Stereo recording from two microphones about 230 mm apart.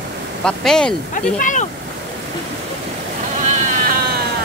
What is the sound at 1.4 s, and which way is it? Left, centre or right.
Speech, left.